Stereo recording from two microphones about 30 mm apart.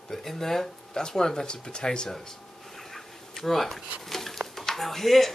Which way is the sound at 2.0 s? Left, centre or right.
Centre.